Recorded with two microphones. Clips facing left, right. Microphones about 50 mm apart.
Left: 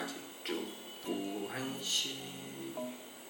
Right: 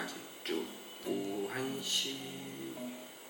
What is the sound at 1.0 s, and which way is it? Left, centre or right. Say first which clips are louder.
Music: right 1 dB; left.